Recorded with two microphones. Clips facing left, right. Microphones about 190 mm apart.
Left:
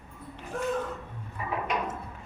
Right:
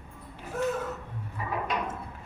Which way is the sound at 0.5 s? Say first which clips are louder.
Right 3 dB; 5° right (ahead or behind).